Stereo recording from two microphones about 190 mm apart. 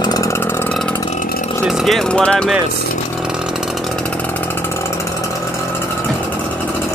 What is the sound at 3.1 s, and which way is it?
Chainsaw, 5° right (ahead or behind).